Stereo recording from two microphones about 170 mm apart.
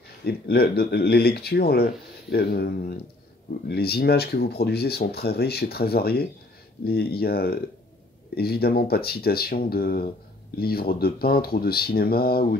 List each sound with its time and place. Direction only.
0.2 s speech: 70° left (ahead or behind)